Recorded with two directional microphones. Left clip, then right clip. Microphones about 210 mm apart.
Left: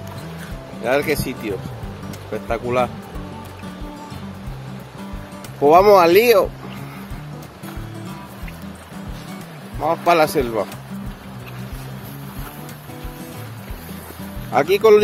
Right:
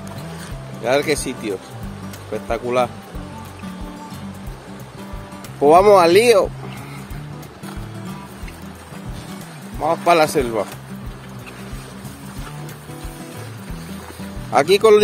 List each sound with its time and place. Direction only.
0.8 s speech: 5° right (ahead or behind)
5.7 s speech: 15° right (ahead or behind)
9.8 s speech: 10° right (ahead or behind)
14.5 s speech: 20° right (ahead or behind)